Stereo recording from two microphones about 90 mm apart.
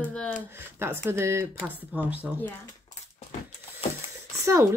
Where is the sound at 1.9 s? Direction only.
20° right (ahead or behind).